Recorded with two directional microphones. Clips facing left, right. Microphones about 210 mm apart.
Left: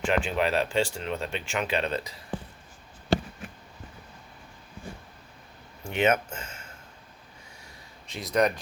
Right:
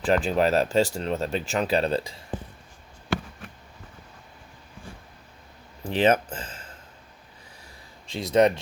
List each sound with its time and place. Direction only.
0.0 s speech: 35° right (ahead or behind)
5.8 s speech: 35° right (ahead or behind)
8.1 s speech: 25° right (ahead or behind)